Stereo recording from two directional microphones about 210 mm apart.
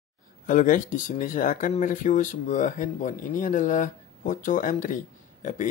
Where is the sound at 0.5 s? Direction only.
40° left (ahead or behind).